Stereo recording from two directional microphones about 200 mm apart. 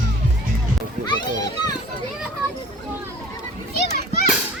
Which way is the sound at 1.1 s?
20° left (ahead or behind).